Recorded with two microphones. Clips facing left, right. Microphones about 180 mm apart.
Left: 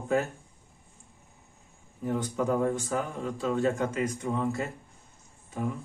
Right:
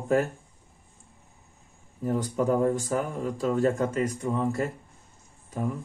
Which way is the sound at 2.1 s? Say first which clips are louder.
Right 3 dB; 40° right (ahead or behind).